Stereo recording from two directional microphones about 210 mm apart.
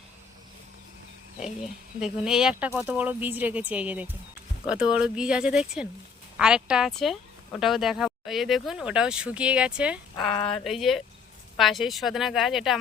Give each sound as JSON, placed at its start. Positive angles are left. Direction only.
{"t": 2.0, "sound": "speech", "side_deg": -5}
{"t": 10.3, "sound": "speech", "side_deg": 25}
{"t": 10.6, "sound": "speech", "side_deg": 0}